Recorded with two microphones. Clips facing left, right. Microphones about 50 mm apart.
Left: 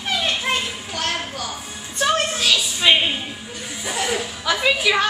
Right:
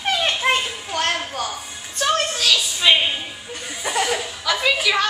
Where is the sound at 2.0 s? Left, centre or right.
Centre.